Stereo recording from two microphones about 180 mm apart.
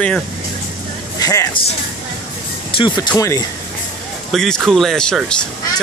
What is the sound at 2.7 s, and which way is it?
Speech, 25° left (ahead or behind).